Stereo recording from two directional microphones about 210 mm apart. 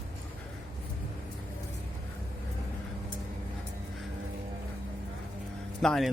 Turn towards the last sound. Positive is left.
turn(degrees=0)  # may be behind; listen again after turning